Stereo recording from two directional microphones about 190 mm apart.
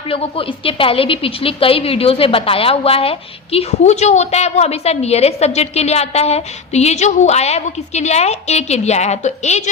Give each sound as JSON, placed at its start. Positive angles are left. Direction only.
{"t": 0.1, "sound": "a woman's voice", "side_deg": 30}